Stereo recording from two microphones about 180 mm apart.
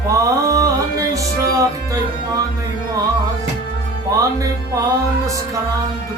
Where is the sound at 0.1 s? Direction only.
20° right (ahead or behind).